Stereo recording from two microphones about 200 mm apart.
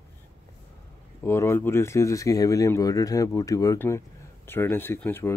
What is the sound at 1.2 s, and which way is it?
Speech, 10° left (ahead or behind).